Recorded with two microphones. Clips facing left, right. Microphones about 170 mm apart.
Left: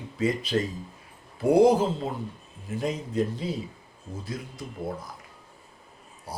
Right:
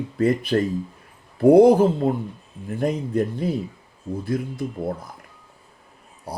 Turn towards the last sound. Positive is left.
turn(degrees=-55)  # may be behind; listen again after turning